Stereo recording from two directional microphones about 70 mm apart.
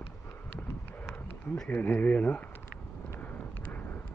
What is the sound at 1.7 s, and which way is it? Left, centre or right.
Speech, left.